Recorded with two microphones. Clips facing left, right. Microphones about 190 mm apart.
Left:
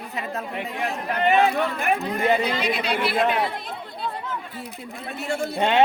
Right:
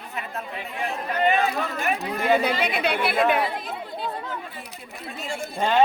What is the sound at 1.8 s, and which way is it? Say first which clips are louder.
Speech: left 3 dB; 55° left (ahead or behind).